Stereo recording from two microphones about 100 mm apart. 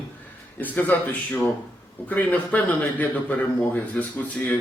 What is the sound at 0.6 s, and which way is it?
A man's voice, 15° left (ahead or behind).